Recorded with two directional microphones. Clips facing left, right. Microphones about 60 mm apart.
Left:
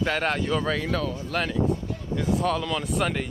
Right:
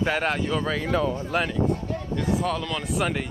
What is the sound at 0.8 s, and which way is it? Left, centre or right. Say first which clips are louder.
Speech: right 3 dB; centre.